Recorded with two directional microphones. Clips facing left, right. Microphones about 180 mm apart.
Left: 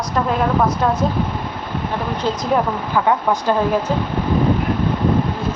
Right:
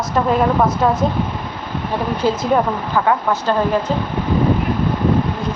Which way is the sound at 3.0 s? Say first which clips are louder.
Left 1 dB; 15° left (ahead or behind).